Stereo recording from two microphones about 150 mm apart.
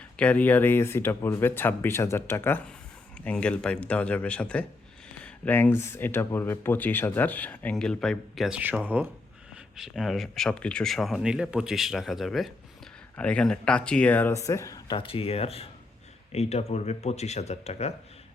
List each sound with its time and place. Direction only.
0.0 s speech: 10° left (ahead or behind)
14.3 s speech: 20° left (ahead or behind)
14.9 s speech: 40° left (ahead or behind)